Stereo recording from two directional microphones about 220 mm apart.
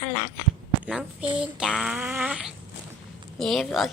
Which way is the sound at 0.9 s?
5° right (ahead or behind).